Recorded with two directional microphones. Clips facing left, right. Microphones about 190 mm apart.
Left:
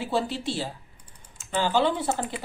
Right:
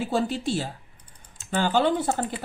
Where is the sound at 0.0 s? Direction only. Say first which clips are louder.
Right 2 dB; 45° right (ahead or behind).